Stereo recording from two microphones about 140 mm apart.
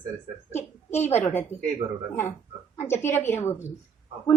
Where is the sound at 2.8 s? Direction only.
15° left (ahead or behind).